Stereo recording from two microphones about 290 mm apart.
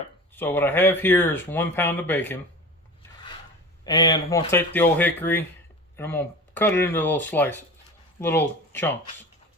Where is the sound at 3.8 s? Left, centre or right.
Centre.